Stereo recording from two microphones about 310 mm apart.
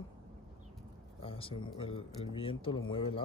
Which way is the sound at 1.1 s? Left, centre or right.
Centre.